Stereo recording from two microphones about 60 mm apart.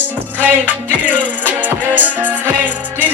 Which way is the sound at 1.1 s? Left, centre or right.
Right.